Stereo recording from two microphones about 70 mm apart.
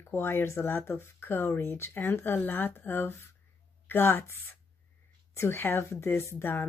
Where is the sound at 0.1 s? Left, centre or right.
Left.